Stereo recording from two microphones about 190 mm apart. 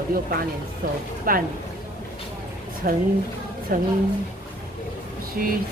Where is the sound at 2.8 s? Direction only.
50° right (ahead or behind).